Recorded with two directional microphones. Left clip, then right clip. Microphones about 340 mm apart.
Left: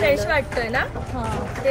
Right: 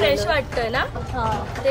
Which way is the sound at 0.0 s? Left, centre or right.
Centre.